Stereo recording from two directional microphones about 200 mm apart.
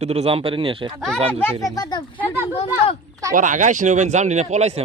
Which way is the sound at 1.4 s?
15° left (ahead or behind).